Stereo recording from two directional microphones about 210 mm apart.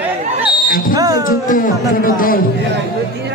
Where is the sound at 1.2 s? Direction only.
40° left (ahead or behind).